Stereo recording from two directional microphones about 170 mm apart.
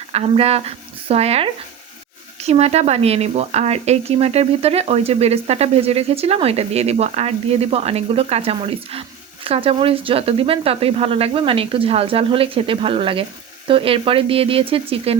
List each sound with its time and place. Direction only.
0.1 s speech: 35° right (ahead or behind)